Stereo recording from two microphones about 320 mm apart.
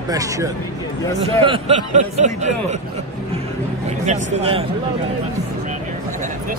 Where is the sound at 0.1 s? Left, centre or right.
Centre.